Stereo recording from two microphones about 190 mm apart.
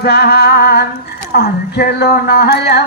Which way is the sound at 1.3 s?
55° left (ahead or behind).